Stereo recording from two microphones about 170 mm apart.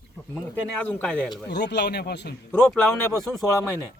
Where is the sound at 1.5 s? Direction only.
85° left.